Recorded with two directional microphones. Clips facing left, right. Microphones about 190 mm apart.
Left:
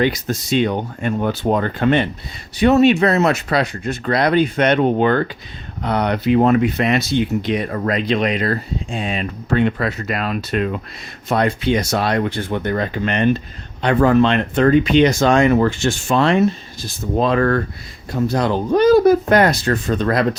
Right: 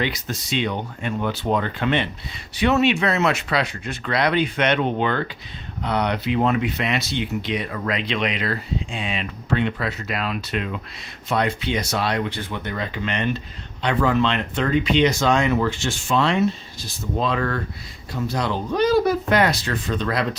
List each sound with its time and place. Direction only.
0.0 s speech: 45° left (ahead or behind)